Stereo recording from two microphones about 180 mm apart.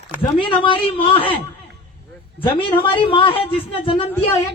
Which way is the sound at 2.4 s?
30° left (ahead or behind).